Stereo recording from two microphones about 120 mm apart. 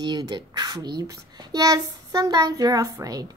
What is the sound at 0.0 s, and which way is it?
A child's voice, 35° right (ahead or behind).